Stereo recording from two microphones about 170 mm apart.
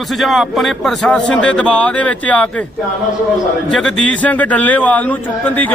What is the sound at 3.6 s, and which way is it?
A man's voice, 5° left (ahead or behind).